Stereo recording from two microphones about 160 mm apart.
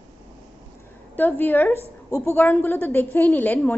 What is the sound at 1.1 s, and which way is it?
A woman's voice, 10° left (ahead or behind).